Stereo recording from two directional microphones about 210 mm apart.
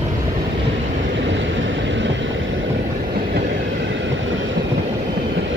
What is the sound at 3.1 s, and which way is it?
Train, 45° right (ahead or behind).